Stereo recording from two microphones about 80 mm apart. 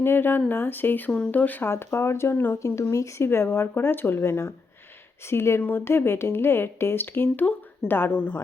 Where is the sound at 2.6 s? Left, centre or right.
Left.